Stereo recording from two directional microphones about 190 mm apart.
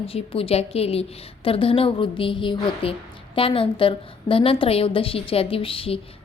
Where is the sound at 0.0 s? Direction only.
30° left (ahead or behind).